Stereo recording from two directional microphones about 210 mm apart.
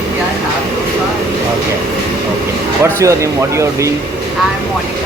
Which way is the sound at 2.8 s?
15° right (ahead or behind).